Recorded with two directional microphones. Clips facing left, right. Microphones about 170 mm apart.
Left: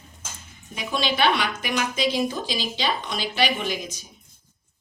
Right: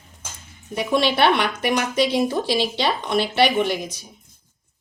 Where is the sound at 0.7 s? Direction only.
65° right (ahead or behind).